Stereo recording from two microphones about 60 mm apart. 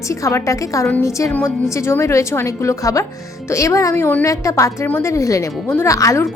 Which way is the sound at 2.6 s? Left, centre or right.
Left.